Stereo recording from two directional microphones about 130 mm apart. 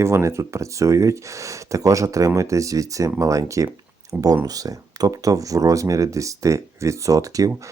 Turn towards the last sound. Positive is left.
turn(degrees=-25)  # may be behind; listen again after turning